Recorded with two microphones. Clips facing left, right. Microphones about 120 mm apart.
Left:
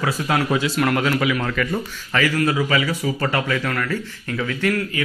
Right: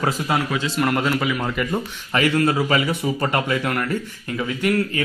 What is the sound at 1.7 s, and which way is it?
A man's voice, 25° right (ahead or behind).